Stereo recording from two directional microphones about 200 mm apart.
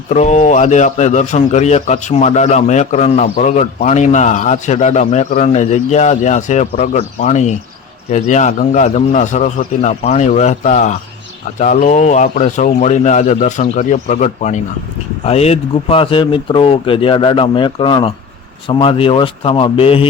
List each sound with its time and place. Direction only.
0.1 s a man's voice: 35° left (ahead or behind)